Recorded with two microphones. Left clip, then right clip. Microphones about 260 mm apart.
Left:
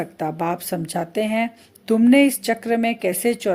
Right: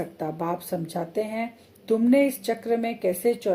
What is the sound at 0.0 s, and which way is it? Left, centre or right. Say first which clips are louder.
Speech: left 5 dB; left.